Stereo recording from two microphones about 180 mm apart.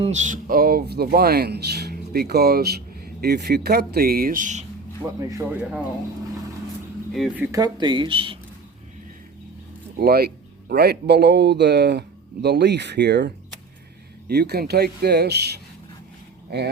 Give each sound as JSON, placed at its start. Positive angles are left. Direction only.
{"t": 0.0, "sound": "speech", "side_deg": -40}
{"t": 5.0, "sound": "speech", "side_deg": -10}
{"t": 7.1, "sound": "speech", "side_deg": -5}
{"t": 7.5, "sound": "speech", "side_deg": -20}
{"t": 10.0, "sound": "a man's voice", "side_deg": -60}